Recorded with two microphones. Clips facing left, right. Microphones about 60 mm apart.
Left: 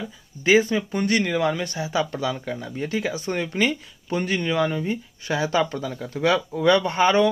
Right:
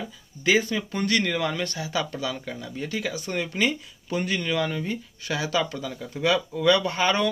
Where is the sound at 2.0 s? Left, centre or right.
Left.